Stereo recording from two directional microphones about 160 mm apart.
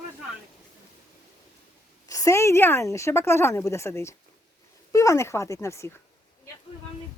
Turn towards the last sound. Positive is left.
turn(degrees=15)  # may be behind; listen again after turning